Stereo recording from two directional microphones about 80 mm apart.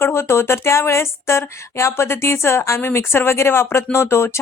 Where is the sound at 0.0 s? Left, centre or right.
Left.